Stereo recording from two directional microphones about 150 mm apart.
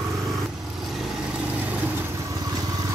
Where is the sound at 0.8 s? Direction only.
5° right (ahead or behind).